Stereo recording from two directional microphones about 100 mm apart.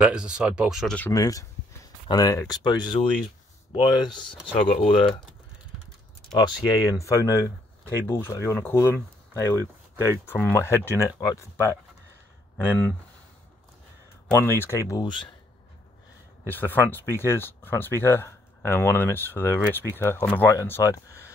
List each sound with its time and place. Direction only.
0.0 s speech: 10° right (ahead or behind)
1.1 s speech: 35° left (ahead or behind)
4.7 s speech: 60° left (ahead or behind)
6.3 s speech: 40° left (ahead or behind)
12.5 s speech: 20° left (ahead or behind)
14.4 s speech: 20° left (ahead or behind)
15.0 s speech: 50° left (ahead or behind)
16.4 s speech: 20° left (ahead or behind)